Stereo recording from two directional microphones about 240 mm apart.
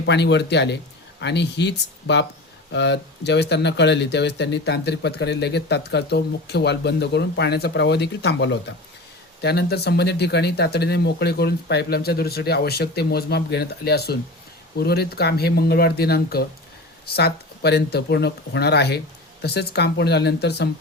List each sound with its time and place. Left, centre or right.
0.0 s speech: left